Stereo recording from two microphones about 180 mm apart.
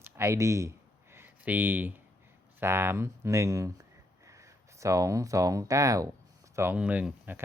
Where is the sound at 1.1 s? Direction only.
10° right (ahead or behind).